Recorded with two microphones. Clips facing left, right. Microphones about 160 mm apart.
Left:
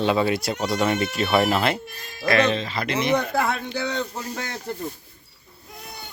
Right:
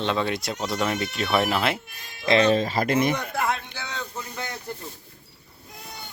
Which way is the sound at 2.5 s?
40° right (ahead or behind).